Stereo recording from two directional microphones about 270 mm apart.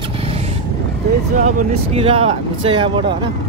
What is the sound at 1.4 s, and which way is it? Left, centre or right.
Speech, right.